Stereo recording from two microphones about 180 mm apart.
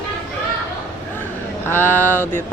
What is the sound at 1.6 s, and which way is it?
Vehicle, 10° left (ahead or behind).